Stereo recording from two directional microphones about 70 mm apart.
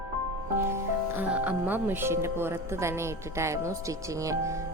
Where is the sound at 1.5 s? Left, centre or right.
Right.